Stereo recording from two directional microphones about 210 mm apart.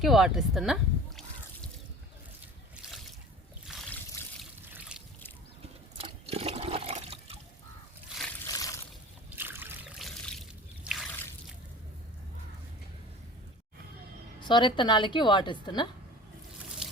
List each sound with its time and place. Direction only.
0.0 s speech: centre (ahead or behind)
2.8 s boat: 5° right (ahead or behind)
3.7 s trickle: centre (ahead or behind)
4.7 s boat: 5° right (ahead or behind)
6.0 s water: 30° right (ahead or behind)
8.4 s boat: 15° left (ahead or behind)
9.3 s boat: 10° right (ahead or behind)
10.0 s trickle: centre (ahead or behind)
14.4 s a woman's voice: 20° left (ahead or behind)